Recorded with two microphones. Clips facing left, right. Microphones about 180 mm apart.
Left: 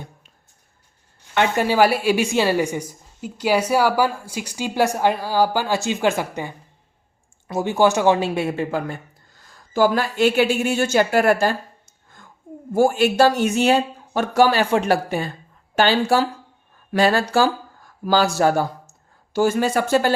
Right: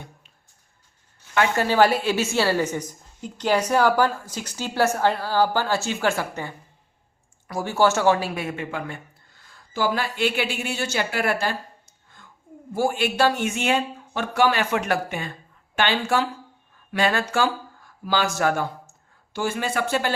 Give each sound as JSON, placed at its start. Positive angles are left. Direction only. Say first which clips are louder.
{"t": 1.4, "sound": "a woman's voice", "louder": "left 2 dB", "side_deg": 15}
{"t": 12.7, "sound": "speech", "louder": "left 6 dB", "side_deg": 45}